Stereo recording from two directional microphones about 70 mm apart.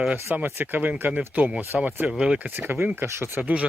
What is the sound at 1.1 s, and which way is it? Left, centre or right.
Speech, centre.